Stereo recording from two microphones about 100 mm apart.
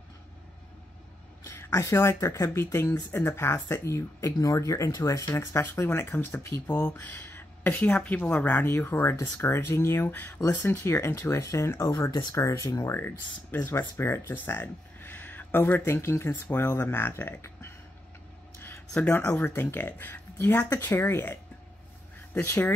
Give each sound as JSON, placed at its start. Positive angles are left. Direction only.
{"t": 1.4, "sound": "speech", "side_deg": 25}
{"t": 18.9, "sound": "speech", "side_deg": 15}